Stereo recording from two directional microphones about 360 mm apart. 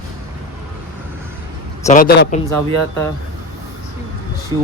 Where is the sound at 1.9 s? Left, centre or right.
Left.